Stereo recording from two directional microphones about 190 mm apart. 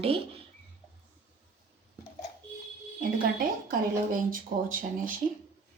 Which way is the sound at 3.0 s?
50° right (ahead or behind).